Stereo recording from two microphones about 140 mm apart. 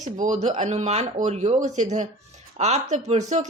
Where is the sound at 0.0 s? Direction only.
60° right (ahead or behind).